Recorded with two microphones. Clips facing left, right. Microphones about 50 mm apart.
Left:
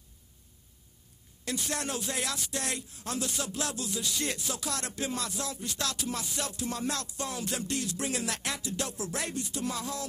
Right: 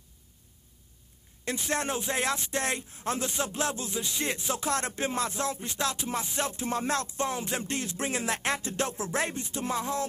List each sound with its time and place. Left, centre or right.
1.7 s speech: right